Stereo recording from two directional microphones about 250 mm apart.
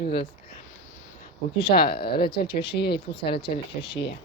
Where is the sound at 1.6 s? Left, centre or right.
Left.